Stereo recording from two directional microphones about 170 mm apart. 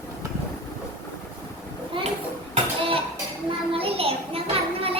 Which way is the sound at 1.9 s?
30° right (ahead or behind).